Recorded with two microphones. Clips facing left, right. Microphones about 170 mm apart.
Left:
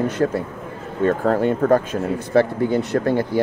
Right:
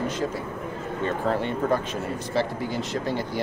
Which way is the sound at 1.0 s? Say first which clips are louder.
Left 8 dB; 45° left (ahead or behind).